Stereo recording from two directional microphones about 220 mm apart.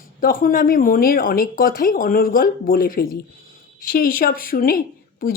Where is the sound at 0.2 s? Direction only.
40° left (ahead or behind).